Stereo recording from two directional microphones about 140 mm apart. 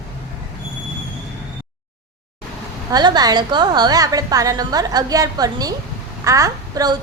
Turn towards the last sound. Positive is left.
turn(degrees=-25)  # may be behind; listen again after turning